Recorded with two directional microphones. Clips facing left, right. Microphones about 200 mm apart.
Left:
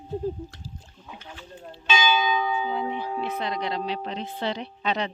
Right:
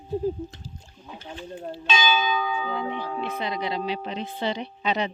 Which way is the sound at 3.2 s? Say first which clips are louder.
Right 1 dB; centre (ahead or behind).